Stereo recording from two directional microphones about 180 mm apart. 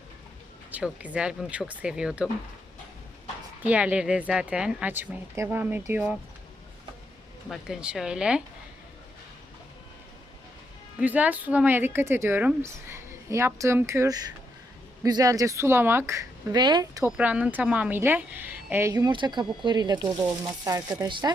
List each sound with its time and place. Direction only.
0.7 s a woman's voice: 5° right (ahead or behind)
3.6 s a woman's voice: 10° right (ahead or behind)
7.5 s a woman's voice: 5° right (ahead or behind)
11.0 s a woman's voice: 10° right (ahead or behind)
17.1 s a woman's voice: 5° right (ahead or behind); by 21.3 s 25° right (ahead or behind)